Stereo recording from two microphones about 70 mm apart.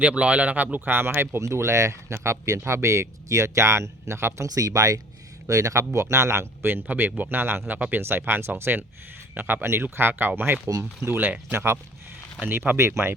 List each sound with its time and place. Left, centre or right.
0.0 s speech: centre; by 1.4 s right
1.4 s speech: right
4.4 s speech: right
12.4 s speech: right